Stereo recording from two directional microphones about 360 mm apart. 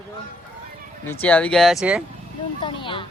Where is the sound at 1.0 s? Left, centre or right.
Centre.